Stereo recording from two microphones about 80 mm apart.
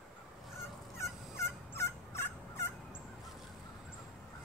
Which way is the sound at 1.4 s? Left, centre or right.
Left.